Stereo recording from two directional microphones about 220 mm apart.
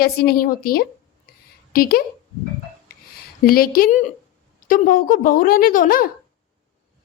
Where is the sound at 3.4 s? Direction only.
40° left (ahead or behind).